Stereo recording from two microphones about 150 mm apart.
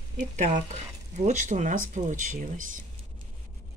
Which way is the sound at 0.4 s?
50° right (ahead or behind).